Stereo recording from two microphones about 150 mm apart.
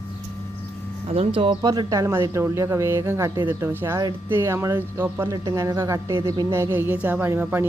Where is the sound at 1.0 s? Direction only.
40° right (ahead or behind).